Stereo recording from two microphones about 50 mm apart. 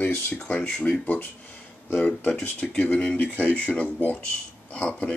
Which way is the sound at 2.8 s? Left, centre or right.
Left.